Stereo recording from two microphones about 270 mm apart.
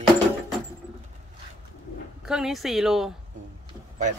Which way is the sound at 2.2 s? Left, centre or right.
Centre.